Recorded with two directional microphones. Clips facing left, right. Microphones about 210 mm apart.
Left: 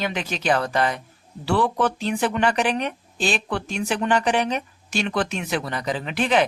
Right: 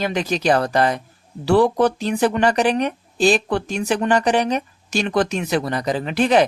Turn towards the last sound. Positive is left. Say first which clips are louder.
# right 5 dB
turn(degrees=-40)  # may be behind; listen again after turning